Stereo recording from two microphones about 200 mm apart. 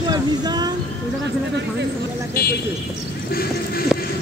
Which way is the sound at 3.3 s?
50° left (ahead or behind).